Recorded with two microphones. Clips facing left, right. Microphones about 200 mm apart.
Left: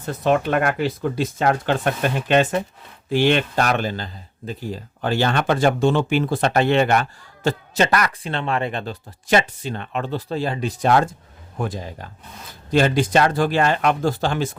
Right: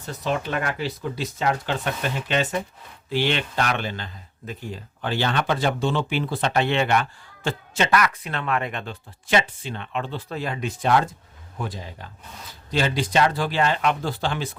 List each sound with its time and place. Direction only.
0.0 s speech: 55° left (ahead or behind)